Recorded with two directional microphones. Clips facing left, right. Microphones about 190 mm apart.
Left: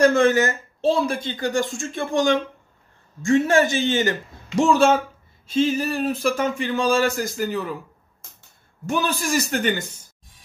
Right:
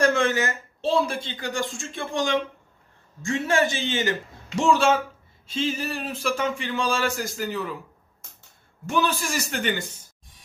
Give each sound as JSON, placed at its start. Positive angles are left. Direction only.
{"t": 0.1, "sound": "a woman's voice", "side_deg": 40}
{"t": 8.8, "sound": "speech", "side_deg": 45}